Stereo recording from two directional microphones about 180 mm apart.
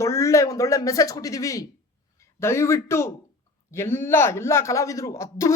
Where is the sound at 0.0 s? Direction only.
15° left (ahead or behind).